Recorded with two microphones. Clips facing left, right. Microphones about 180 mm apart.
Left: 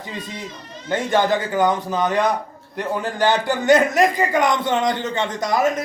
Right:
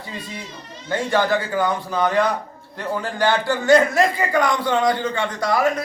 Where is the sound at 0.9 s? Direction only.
20° left (ahead or behind).